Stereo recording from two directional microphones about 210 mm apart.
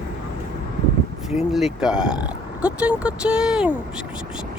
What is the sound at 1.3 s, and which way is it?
Speech, centre (ahead or behind).